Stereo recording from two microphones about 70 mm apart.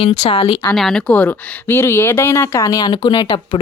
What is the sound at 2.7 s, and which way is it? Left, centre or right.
Speech, left.